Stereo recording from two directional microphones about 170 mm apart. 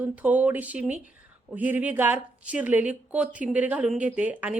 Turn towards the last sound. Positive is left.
turn(degrees=-10)  # may be behind; listen again after turning